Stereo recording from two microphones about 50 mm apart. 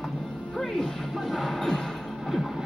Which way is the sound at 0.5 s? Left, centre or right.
Centre.